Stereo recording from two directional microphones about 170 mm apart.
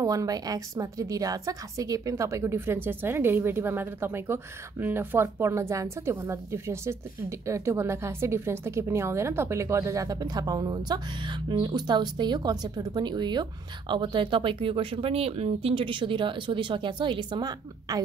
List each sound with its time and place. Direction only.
0.0 s a woman's voice: 20° right (ahead or behind)